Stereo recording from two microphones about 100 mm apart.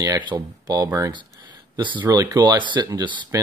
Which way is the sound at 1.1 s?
50° right (ahead or behind).